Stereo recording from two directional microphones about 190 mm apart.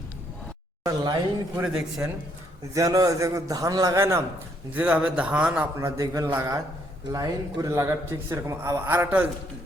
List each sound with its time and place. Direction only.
1.5 s speech: 5° right (ahead or behind)
2.7 s a man's voice: 20° right (ahead or behind)
6.0 s a man's voice: 15° right (ahead or behind)